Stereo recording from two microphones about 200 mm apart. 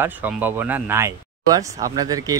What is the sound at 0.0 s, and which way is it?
Speech, 10° right (ahead or behind).